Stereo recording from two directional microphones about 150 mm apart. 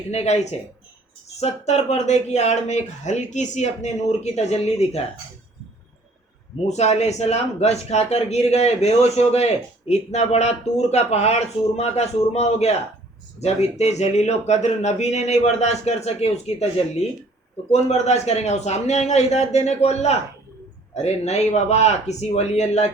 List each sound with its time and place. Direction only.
0.1 s speech: 45° left (ahead or behind)
6.7 s speech: 50° left (ahead or behind)